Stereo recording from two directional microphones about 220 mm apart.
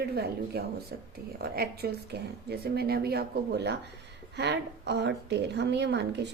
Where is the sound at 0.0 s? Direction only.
45° right (ahead or behind).